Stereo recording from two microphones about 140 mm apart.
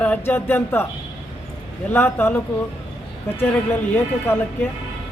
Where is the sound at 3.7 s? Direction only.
15° left (ahead or behind).